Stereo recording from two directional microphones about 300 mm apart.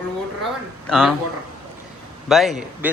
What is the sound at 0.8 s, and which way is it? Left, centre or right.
Speech, centre.